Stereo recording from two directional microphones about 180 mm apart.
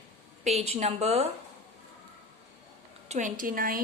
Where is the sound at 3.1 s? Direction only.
45° right (ahead or behind).